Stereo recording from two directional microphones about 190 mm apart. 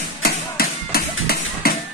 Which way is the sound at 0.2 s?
55° left (ahead or behind).